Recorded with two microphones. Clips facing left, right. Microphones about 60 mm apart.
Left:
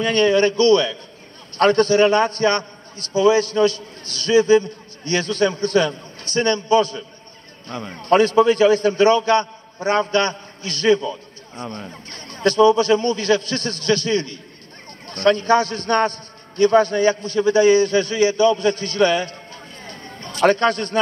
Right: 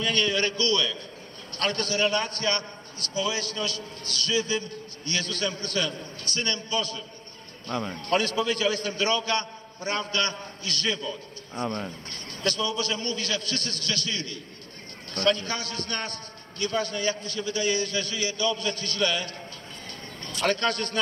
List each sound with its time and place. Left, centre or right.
0.0 s a man's voice: left
8.0 s a man's voice: left
19.9 s music: left
20.4 s a man's voice: left